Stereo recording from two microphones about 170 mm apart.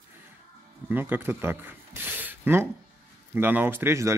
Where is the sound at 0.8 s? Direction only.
10° right (ahead or behind).